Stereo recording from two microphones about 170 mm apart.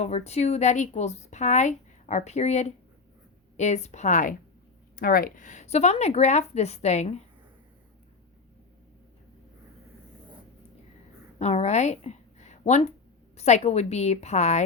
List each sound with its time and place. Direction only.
0.0 s a woman's voice: 40° left (ahead or behind)
4.9 s a woman's voice: 60° left (ahead or behind); by 7.2 s 40° left (ahead or behind)
11.3 s a woman's voice: 40° left (ahead or behind)